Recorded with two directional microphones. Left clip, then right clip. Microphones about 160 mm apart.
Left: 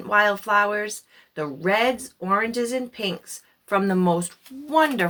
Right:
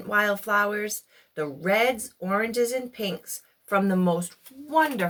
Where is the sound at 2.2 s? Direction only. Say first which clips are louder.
Left 2 dB; 20° left (ahead or behind).